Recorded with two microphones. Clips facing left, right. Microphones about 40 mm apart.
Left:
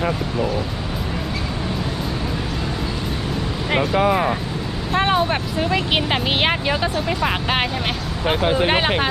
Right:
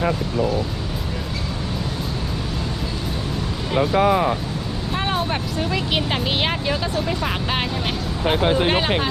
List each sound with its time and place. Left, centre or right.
4.9 s speech: centre